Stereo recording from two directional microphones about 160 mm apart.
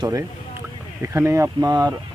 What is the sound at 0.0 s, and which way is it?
Speech, 20° right (ahead or behind).